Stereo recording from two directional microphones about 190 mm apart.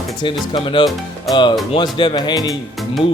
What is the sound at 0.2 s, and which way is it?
Speech, 25° left (ahead or behind).